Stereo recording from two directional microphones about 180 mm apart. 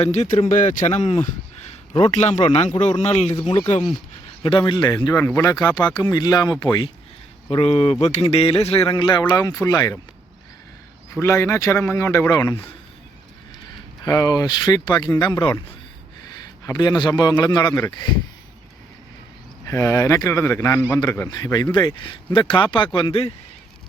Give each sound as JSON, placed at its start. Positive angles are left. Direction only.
{"t": 0.0, "sound": "speech", "side_deg": 40}
{"t": 4.4, "sound": "speech", "side_deg": 25}
{"t": 11.1, "sound": "speech", "side_deg": 15}
{"t": 14.0, "sound": "speech", "side_deg": 20}
{"t": 16.6, "sound": "speech", "side_deg": 20}
{"t": 19.6, "sound": "speech", "side_deg": 15}